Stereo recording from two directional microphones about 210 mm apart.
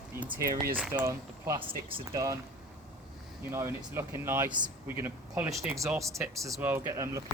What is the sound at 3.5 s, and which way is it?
Speech, 10° right (ahead or behind).